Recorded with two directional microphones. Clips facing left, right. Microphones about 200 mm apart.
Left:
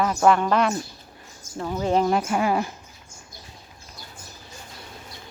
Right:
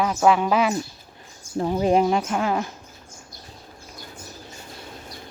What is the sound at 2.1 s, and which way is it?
Speech, 5° left (ahead or behind).